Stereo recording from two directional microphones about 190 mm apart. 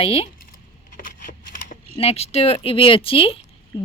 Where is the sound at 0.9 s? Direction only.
45° left (ahead or behind).